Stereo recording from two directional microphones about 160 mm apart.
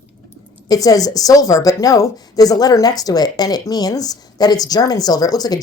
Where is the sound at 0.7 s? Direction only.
20° left (ahead or behind).